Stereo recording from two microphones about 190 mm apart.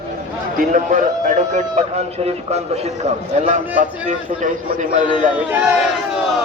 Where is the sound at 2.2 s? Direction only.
35° right (ahead or behind).